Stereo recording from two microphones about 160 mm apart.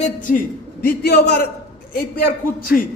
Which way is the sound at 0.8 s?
90° left.